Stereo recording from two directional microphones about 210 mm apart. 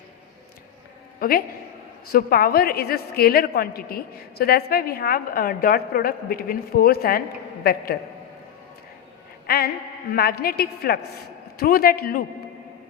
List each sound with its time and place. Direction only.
2.1 s a woman's voice: 45° left (ahead or behind)
10.2 s a woman's voice: 45° left (ahead or behind)